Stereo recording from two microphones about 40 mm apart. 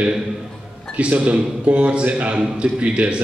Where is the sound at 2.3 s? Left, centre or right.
Right.